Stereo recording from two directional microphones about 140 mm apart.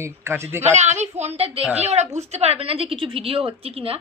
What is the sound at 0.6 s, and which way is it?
A woman's voice, 55° right (ahead or behind).